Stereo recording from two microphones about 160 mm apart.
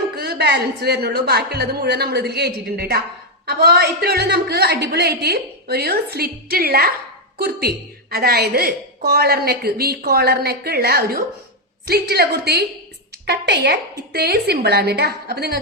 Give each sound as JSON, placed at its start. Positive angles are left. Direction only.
{"t": 0.2, "sound": "a woman's voice", "side_deg": -85}